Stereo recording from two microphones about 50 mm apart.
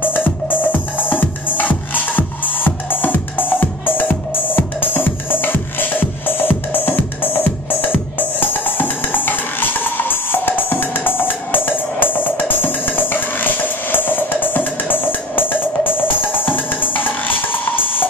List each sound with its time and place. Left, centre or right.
0.0 s music: left